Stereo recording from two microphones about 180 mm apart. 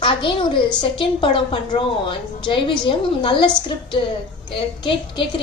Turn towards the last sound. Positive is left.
turn(degrees=30)  # may be behind; listen again after turning